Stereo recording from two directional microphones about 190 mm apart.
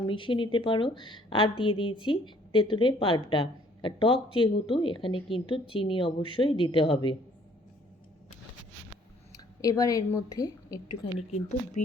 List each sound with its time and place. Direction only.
0.1 s a woman's voice: 25° left (ahead or behind)
9.6 s a woman's voice: 20° left (ahead or behind)
11.3 s speech: 35° left (ahead or behind)